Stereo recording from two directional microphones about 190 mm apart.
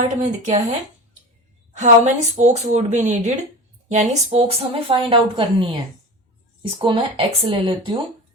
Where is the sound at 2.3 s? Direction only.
40° right (ahead or behind).